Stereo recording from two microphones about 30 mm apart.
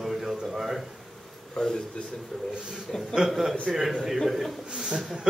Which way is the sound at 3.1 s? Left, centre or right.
Centre.